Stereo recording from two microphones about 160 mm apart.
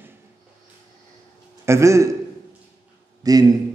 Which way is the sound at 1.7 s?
20° right (ahead or behind).